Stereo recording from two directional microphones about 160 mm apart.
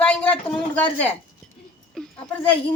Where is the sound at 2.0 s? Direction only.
5° left (ahead or behind).